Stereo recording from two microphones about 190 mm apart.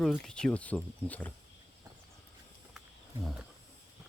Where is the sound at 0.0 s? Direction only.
Centre (ahead or behind).